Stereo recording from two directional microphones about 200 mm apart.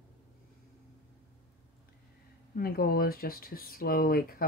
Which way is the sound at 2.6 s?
50° left (ahead or behind).